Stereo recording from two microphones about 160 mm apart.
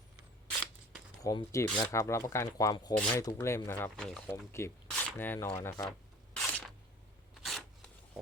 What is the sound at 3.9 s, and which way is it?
Speech, 5° left (ahead or behind).